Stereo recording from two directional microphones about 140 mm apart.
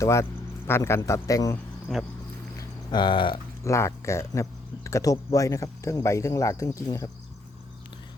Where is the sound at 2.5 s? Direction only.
30° left (ahead or behind).